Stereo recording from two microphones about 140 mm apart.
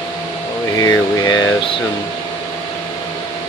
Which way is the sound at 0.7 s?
25° left (ahead or behind).